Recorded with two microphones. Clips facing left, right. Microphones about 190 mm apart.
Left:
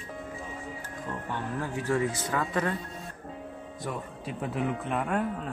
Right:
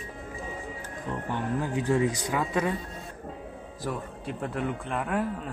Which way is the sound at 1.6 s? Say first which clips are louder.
Right 2 dB; 15° right (ahead or behind).